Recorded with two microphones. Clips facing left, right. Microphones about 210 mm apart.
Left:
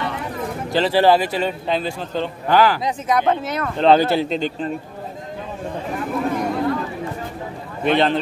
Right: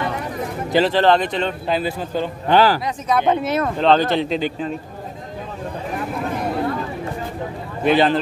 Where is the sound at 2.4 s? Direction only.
30° right (ahead or behind).